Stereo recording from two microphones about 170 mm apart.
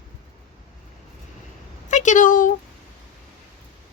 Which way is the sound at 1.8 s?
45° left (ahead or behind).